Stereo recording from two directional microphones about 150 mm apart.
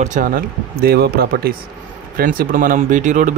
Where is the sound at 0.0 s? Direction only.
60° right (ahead or behind); by 1.6 s 85° right.